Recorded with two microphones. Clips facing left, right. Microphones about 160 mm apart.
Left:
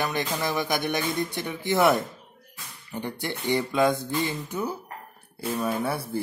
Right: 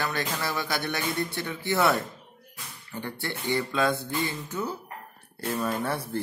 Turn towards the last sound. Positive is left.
turn(degrees=10)  # may be behind; listen again after turning